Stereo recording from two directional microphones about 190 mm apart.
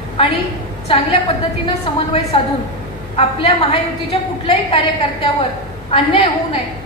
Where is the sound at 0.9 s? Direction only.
25° left (ahead or behind).